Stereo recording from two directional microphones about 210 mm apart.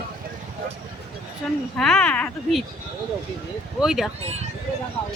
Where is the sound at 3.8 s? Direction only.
Centre (ahead or behind).